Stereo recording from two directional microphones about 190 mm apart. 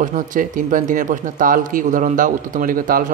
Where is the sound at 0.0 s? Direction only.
40° right (ahead or behind).